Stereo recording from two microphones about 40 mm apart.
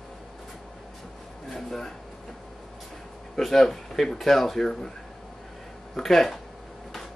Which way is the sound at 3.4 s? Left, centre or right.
Centre.